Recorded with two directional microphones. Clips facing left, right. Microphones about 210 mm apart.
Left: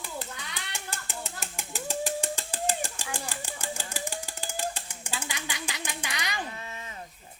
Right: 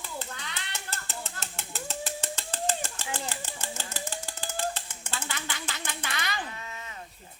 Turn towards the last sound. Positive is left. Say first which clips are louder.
# left 1 dB
turn(degrees=30)  # may be behind; listen again after turning